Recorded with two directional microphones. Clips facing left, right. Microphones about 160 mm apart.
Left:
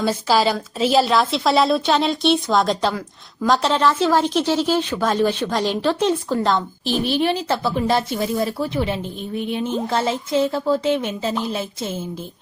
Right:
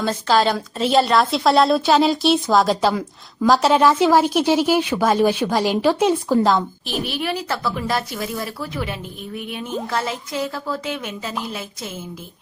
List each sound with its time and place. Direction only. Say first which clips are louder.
0.0 s a woman's voice: even; 10° left (ahead or behind); by 6.6 s 10° right (ahead or behind)
7.0 s speech: left 5 dB; 30° left (ahead or behind)